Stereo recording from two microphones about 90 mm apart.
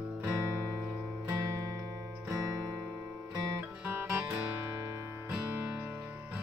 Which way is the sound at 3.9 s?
25° right (ahead or behind).